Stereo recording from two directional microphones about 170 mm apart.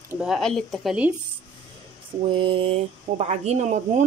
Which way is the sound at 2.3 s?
30° right (ahead or behind).